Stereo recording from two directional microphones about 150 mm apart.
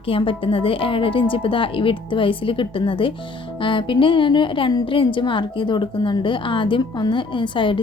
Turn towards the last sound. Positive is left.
turn(degrees=35)  # may be behind; listen again after turning